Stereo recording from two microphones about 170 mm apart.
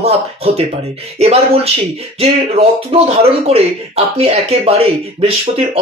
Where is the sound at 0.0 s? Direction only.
35° right (ahead or behind).